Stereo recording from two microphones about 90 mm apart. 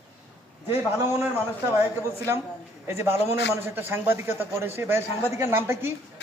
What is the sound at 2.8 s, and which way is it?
A man's voice, 30° right (ahead or behind).